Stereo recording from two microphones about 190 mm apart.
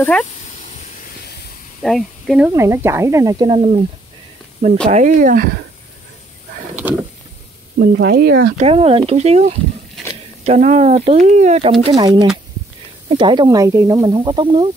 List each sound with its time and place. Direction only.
0.0 s speech: 5° left (ahead or behind)
0.6 s vehicle: 35° left (ahead or behind)
1.2 s hiss: 55° left (ahead or behind)
1.8 s speech: centre (ahead or behind)
2.5 s speech: 15° right (ahead or behind)
4.6 s speech: 40° right (ahead or behind)
7.8 s speech: 60° right (ahead or behind)
8.5 s speech: 30° right (ahead or behind)
13.2 s speech: 25° right (ahead or behind)